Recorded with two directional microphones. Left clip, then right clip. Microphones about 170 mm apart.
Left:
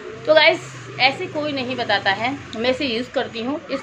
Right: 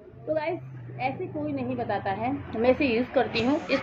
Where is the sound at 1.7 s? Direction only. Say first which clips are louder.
Left 11 dB; 10° left (ahead or behind).